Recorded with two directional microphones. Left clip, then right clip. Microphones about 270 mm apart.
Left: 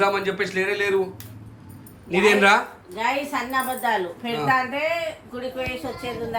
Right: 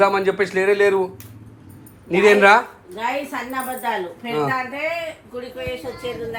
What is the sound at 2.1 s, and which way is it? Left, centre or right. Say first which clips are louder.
Speech: right 4 dB; centre.